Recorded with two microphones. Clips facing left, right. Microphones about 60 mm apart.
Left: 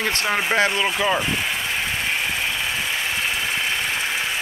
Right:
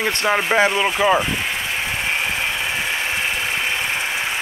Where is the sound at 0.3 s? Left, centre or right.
Centre.